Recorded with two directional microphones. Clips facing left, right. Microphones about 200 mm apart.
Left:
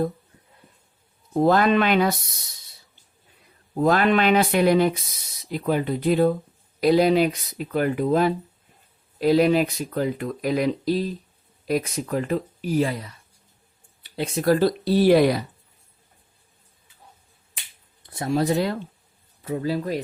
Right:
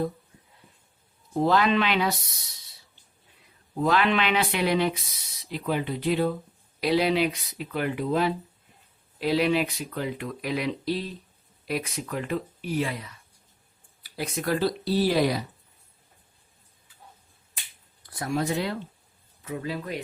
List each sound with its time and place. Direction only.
1.3 s speech: 50° left (ahead or behind)
3.8 s speech: 45° left (ahead or behind)
14.0 s a sound: 25° left (ahead or behind)
14.4 s speech: 45° left (ahead or behind)
18.0 s speech: 25° left (ahead or behind)